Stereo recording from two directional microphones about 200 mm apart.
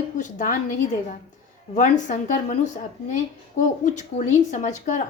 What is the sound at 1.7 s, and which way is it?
Speech, 40° left (ahead or behind).